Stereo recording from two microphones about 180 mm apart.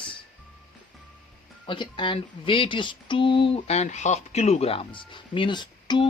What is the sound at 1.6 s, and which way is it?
Speech, 25° left (ahead or behind).